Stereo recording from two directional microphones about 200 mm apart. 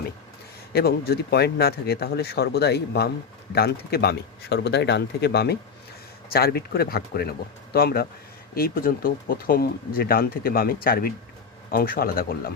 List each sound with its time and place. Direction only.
0.7 s speech: 50° left (ahead or behind)